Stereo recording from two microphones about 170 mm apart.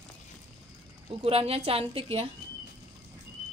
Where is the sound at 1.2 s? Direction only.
35° right (ahead or behind).